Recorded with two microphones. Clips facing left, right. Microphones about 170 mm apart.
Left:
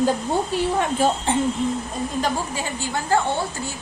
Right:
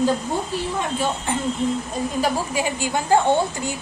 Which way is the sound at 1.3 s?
30° left (ahead or behind).